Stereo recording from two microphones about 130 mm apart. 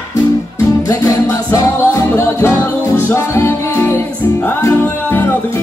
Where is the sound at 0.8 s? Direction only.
25° left (ahead or behind).